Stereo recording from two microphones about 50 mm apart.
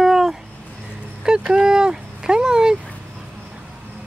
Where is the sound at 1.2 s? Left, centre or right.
Centre.